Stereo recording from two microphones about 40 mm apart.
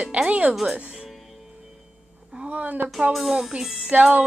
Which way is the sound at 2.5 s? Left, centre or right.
Right.